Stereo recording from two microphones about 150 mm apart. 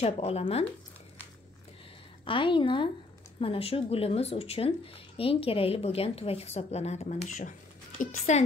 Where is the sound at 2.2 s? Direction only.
35° left (ahead or behind).